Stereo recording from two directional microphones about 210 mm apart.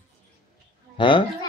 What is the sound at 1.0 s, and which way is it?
Speech, 25° left (ahead or behind).